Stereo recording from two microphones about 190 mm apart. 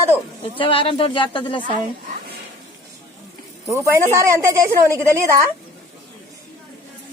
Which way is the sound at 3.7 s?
15° right (ahead or behind).